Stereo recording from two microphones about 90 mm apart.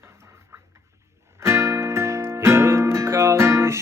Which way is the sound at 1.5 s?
30° right (ahead or behind).